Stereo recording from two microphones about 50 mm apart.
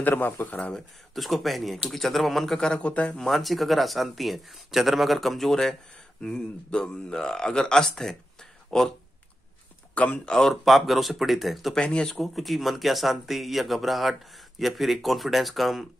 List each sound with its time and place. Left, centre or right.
0.0 s speech: left
1.1 s speech: centre
2.8 s speech: left
3.3 s speech: centre
6.2 s speech: centre
9.9 s speech: left
10.2 s speech: centre
11.7 s speech: centre
12.1 s speech: centre